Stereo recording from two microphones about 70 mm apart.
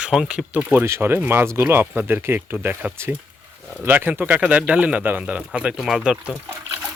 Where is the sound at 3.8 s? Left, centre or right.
Right.